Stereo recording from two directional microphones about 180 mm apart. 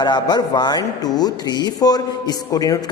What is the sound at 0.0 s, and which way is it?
A man's voice, 25° left (ahead or behind).